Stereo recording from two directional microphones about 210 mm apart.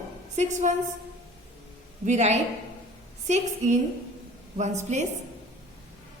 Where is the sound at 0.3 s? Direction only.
35° right (ahead or behind).